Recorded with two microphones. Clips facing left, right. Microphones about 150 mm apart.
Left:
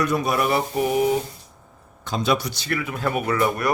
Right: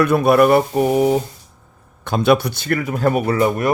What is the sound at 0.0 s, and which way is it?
Mantra, 60° right (ahead or behind).